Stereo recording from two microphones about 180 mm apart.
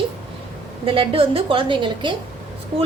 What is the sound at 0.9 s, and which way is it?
A woman's voice, 30° right (ahead or behind).